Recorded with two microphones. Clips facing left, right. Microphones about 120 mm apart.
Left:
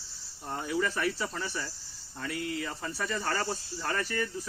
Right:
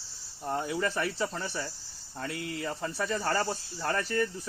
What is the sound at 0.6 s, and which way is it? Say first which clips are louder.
Speech: even; 25° right (ahead or behind).